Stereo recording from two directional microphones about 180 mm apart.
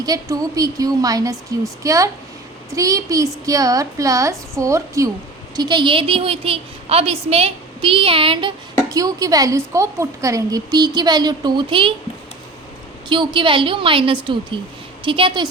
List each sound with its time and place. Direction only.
0.0 s a woman's voice: 20° right (ahead or behind)
13.1 s a woman's voice: 25° right (ahead or behind)